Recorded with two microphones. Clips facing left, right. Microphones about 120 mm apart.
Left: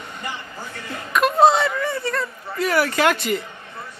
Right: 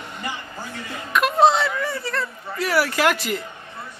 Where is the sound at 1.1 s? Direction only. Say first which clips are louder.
Left 1 dB; centre (ahead or behind).